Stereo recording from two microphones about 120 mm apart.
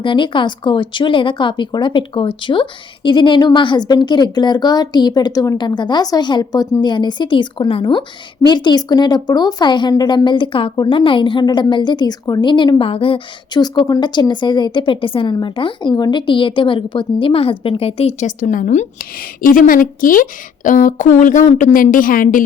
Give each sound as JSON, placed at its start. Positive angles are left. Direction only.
{"t": 0.0, "sound": "a woman's voice", "side_deg": 45}
{"t": 20.7, "sound": "speech", "side_deg": 90}